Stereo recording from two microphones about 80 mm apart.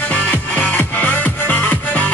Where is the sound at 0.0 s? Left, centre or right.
Centre.